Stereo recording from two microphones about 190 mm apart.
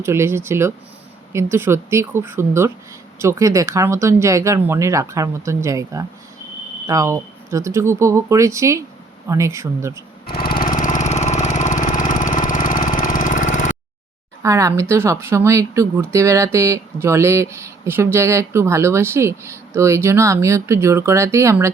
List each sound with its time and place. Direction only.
0.0 s speech: 15° right (ahead or behind)
10.2 s lawn mower: 50° left (ahead or behind)
14.4 s speech: 15° right (ahead or behind)